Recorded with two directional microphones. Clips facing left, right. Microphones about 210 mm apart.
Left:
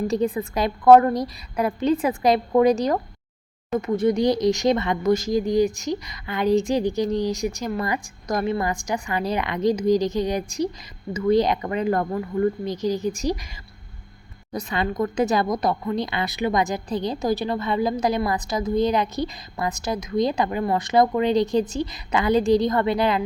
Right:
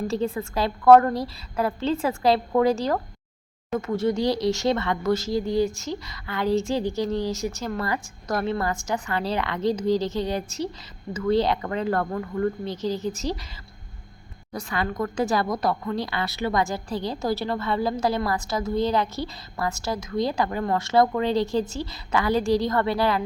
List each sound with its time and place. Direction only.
0.1 s a woman's voice: 15° left (ahead or behind)
14.5 s a woman's voice: 20° left (ahead or behind)